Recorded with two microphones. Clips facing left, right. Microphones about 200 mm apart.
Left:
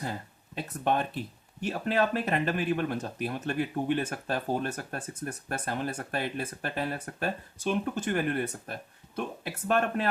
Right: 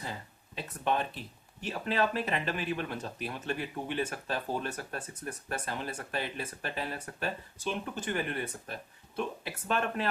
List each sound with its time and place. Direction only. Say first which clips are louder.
0.5 s speech: left 3 dB; 45° left (ahead or behind)